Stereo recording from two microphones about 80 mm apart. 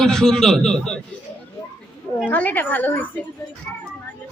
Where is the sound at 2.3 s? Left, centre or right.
Left.